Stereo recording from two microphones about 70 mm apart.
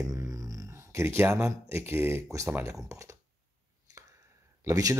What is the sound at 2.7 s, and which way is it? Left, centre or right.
Speech, right.